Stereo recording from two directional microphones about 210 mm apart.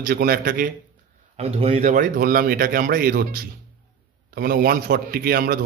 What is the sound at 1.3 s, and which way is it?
Speech, 30° right (ahead or behind).